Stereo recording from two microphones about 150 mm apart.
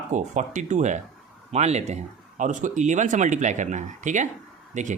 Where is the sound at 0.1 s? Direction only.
55° right (ahead or behind).